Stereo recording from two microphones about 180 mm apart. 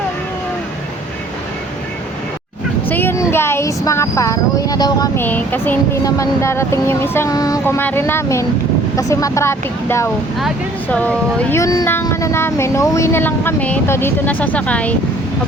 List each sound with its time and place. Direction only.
2.9 s speech: 10° left (ahead or behind)